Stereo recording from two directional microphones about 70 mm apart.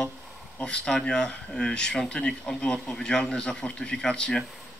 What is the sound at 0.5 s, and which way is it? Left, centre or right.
Speech, centre.